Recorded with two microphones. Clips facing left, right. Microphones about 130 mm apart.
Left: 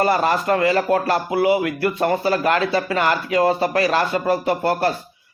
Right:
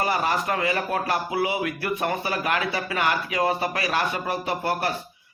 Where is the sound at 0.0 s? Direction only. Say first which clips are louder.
Left 6 dB; 70° left (ahead or behind).